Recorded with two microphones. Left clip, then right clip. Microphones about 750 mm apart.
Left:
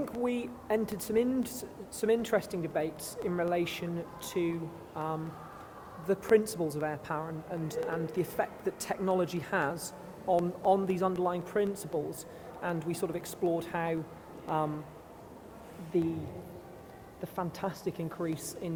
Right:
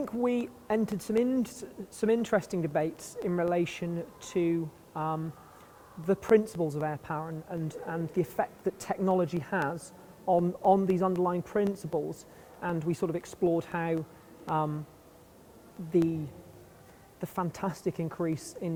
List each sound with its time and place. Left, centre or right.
0.0 s speech: right
17.2 s speech: right